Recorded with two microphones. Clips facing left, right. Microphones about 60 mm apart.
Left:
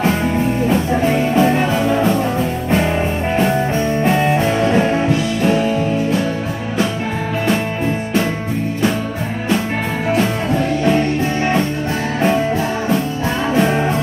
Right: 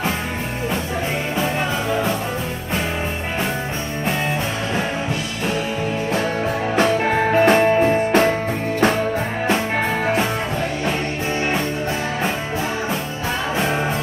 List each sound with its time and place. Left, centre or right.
7.3 s music: right